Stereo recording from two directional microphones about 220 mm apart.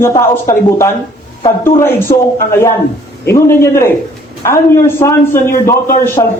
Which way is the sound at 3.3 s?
10° left (ahead or behind).